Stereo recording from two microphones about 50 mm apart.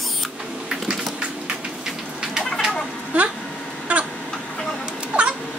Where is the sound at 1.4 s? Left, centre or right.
Centre.